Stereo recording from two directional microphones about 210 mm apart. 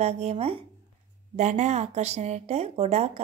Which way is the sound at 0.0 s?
30° right (ahead or behind).